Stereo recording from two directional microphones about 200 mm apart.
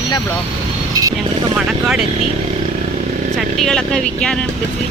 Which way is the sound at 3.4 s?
Centre (ahead or behind).